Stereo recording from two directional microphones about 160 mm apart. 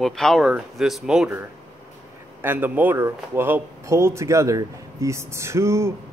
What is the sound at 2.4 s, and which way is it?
A man's voice, 10° right (ahead or behind).